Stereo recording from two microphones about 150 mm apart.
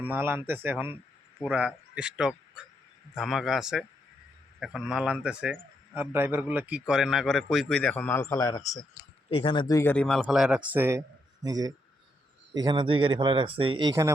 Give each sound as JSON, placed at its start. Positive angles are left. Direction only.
{"t": 0.0, "sound": "a man's voice", "side_deg": -15}
{"t": 9.3, "sound": "speech", "side_deg": 35}
{"t": 9.8, "sound": "a man's voice", "side_deg": 5}